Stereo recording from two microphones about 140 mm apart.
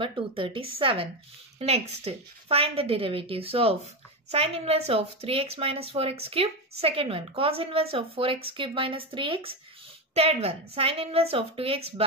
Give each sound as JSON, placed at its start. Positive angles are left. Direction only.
{"t": 0.0, "sound": "a woman's voice", "side_deg": -40}